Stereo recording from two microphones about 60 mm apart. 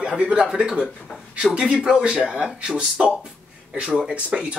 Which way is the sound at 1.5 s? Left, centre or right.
Centre.